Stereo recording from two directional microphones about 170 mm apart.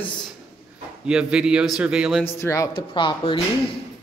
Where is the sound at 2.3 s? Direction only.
15° left (ahead or behind).